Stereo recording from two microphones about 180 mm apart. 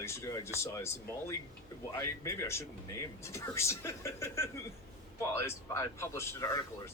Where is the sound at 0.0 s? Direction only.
15° left (ahead or behind).